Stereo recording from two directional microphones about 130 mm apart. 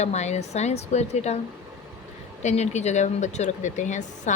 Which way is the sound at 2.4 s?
60° left (ahead or behind).